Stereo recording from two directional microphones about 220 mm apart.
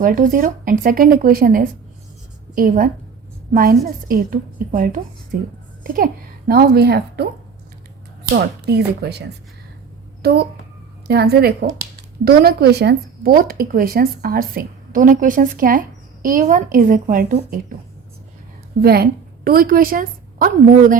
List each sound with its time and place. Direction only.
0.0 s a child's voice: 40° right (ahead or behind)
8.4 s speech: 45° right (ahead or behind)
10.2 s speech: 45° right (ahead or behind)
18.8 s speech: 45° right (ahead or behind)